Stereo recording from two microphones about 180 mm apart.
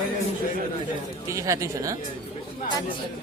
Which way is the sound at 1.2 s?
15° right (ahead or behind).